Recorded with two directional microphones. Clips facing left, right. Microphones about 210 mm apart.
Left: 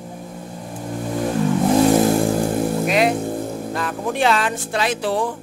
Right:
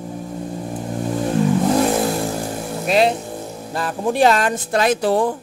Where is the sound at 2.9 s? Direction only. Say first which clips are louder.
Right 6 dB; 30° right (ahead or behind).